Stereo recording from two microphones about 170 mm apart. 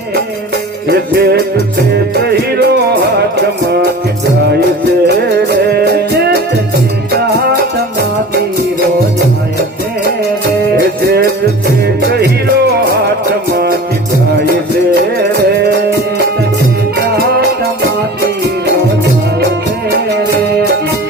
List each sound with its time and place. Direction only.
0.9 s music: 70° right (ahead or behind)
5.0 s music: 70° right (ahead or behind)
10.8 s music: 75° right (ahead or behind)